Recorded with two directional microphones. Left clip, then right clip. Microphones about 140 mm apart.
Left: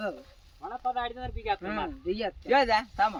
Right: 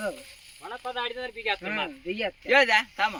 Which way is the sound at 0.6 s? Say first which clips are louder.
Left 1 dB; 85° left.